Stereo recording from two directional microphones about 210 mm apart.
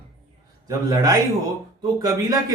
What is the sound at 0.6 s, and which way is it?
Speech, 15° right (ahead or behind).